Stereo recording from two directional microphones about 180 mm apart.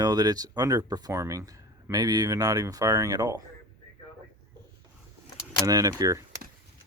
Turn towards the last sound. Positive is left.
turn(degrees=-20)  # may be behind; listen again after turning